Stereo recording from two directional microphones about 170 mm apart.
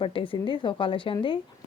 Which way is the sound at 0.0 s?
30° left (ahead or behind).